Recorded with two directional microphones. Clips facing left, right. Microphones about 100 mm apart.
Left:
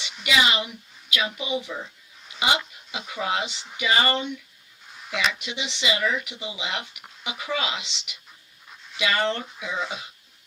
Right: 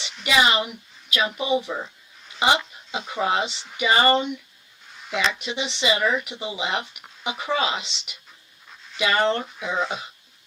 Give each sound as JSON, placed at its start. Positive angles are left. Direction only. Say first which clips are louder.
{"t": 0.3, "sound": "speech", "louder": "right 3 dB", "side_deg": -35}
{"t": 2.9, "sound": "speech", "louder": "right 4 dB", "side_deg": -35}
{"t": 5.3, "sound": "speech", "louder": "right 4 dB", "side_deg": -35}
{"t": 8.7, "sound": "dog", "louder": "even", "side_deg": 0}
{"t": 9.0, "sound": "speech", "louder": "right 3 dB", "side_deg": -35}